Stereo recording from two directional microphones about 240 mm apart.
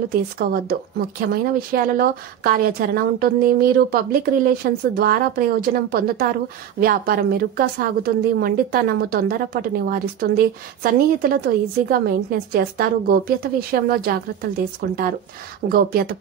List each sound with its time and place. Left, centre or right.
0.1 s a woman's voice: right